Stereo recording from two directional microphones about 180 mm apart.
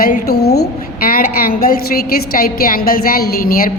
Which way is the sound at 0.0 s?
55° left (ahead or behind).